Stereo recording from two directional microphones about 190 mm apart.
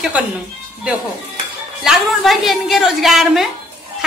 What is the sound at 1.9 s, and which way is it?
A woman's voice, centre (ahead or behind).